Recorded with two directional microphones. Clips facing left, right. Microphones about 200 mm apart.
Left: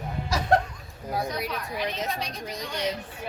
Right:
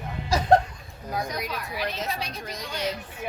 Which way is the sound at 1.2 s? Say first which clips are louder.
Left 1 dB; 15° right (ahead or behind).